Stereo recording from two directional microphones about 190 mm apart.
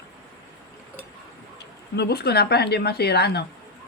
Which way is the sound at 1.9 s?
60° left (ahead or behind).